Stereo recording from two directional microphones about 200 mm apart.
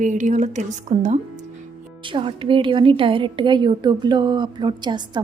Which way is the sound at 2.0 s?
25° right (ahead or behind).